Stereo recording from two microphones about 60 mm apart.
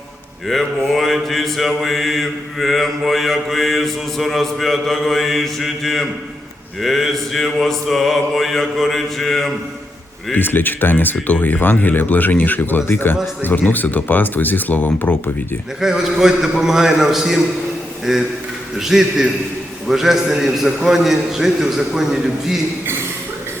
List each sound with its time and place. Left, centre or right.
0.4 s mantra: centre
10.3 s speech: left
15.8 s a man's voice: centre
19.9 s mantra: centre